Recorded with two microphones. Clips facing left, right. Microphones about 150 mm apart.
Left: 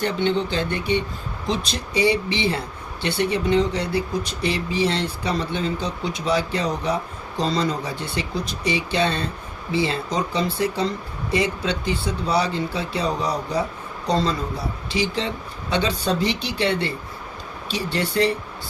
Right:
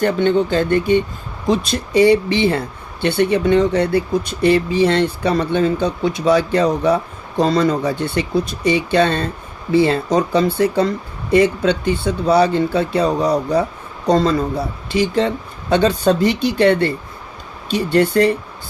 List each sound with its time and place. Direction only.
0.0 s speech: 50° right (ahead or behind)